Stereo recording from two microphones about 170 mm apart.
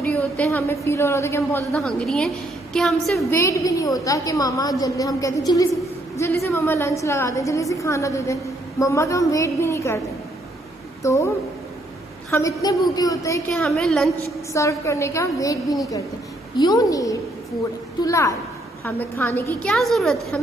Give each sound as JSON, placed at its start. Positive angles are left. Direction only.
{"t": 0.0, "sound": "a woman's voice", "side_deg": 10}
{"t": 1.7, "sound": "a woman's voice", "side_deg": 5}
{"t": 3.3, "sound": "a woman's voice", "side_deg": 15}
{"t": 11.0, "sound": "a woman's voice", "side_deg": 15}
{"t": 13.5, "sound": "a woman's voice", "side_deg": 0}
{"t": 14.5, "sound": "a woman's voice", "side_deg": 15}